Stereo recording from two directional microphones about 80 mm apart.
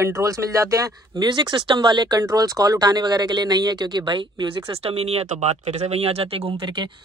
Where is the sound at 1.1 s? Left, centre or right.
Right.